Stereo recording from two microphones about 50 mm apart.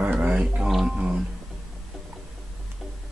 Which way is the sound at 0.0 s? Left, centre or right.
Right.